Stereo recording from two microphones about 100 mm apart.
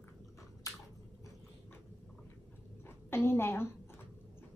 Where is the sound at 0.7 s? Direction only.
35° left (ahead or behind).